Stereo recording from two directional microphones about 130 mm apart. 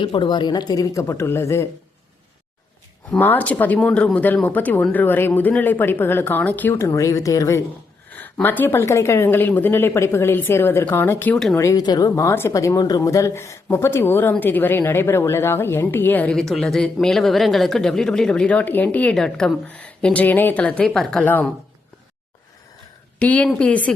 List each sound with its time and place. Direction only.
0.0 s a woman's voice: 35° left (ahead or behind); by 1.6 s 20° left (ahead or behind)
3.1 s speech: 15° left (ahead or behind)
8.1 s speech: 15° left (ahead or behind)
23.2 s speech: 10° left (ahead or behind)